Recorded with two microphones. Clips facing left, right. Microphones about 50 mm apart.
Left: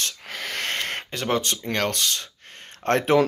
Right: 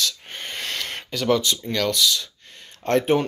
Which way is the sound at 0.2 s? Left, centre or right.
Left.